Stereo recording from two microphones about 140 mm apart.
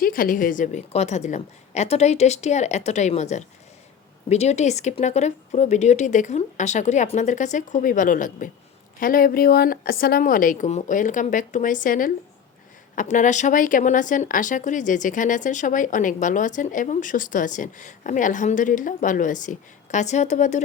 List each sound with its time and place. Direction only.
0.0 s a woman's voice: 90° left; by 8.4 s 75° left (ahead or behind)
9.0 s a woman's voice: 85° left
13.0 s a woman's voice: 65° left (ahead or behind)